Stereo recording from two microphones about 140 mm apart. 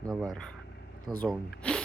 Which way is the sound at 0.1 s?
Centre (ahead or behind).